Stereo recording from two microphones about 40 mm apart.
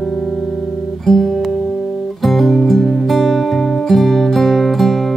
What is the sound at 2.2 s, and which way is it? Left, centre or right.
Music, centre.